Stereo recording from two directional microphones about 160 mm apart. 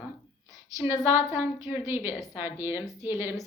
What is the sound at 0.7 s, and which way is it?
A woman's voice, 20° right (ahead or behind).